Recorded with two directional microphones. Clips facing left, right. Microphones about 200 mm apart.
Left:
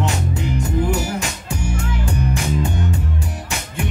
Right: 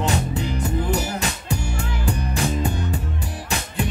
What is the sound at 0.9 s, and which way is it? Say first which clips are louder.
Music: left 2 dB; 35° right (ahead or behind).